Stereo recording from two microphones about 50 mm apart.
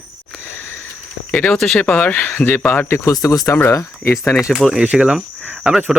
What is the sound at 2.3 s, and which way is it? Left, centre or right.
Speech, left.